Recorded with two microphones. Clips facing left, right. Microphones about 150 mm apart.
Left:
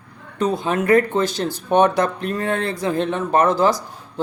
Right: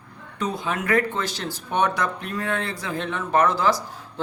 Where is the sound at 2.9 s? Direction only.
25° left (ahead or behind).